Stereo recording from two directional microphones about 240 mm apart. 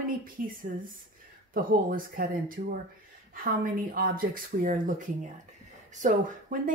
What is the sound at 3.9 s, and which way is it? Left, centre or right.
Speech, right.